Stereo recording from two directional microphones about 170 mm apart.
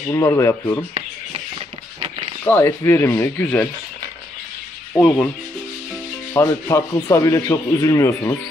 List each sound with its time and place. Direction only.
0.1 s speech: 20° left (ahead or behind)
2.4 s speech: 15° left (ahead or behind)
4.9 s speech: 10° left (ahead or behind)
6.3 s speech: 15° left (ahead or behind)